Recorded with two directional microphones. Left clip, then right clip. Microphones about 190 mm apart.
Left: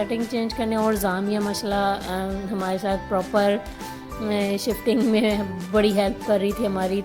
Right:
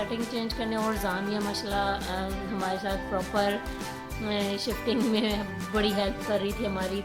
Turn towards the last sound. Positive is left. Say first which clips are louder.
# left 7 dB
turn(degrees=35)  # may be behind; listen again after turning